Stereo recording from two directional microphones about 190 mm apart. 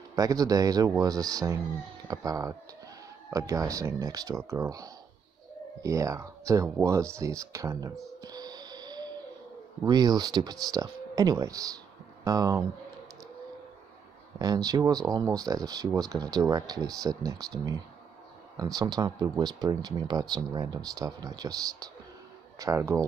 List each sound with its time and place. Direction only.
0.1 s speech: 20° right (ahead or behind)
8.2 s music: 20° right (ahead or behind)
9.8 s speech: 20° right (ahead or behind)
14.4 s speech: 20° right (ahead or behind)